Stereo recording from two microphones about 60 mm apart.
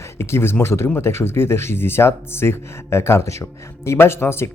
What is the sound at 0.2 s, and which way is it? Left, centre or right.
Speech, left.